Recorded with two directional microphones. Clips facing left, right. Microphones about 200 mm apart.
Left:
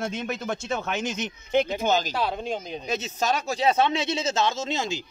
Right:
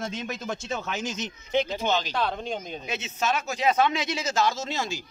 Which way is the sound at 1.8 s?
45° left (ahead or behind).